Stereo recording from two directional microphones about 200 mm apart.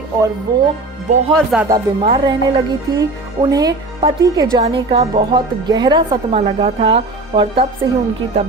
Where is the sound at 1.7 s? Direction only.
20° right (ahead or behind).